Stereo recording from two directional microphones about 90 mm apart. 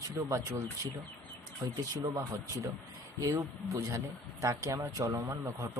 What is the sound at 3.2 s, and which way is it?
Speech, 40° right (ahead or behind).